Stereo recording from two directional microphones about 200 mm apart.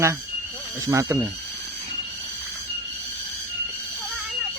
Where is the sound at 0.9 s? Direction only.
15° right (ahead or behind).